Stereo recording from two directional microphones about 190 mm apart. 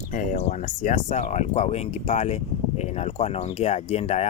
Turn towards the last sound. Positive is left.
turn(degrees=35)  # may be behind; listen again after turning